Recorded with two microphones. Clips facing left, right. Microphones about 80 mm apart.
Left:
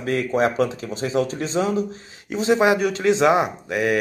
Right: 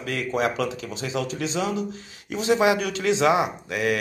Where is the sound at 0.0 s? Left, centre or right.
Left.